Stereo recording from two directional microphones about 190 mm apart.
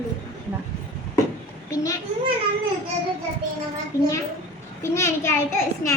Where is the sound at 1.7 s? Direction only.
15° left (ahead or behind).